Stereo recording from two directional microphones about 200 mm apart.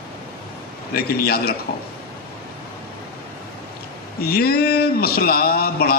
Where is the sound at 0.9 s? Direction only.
50° left (ahead or behind).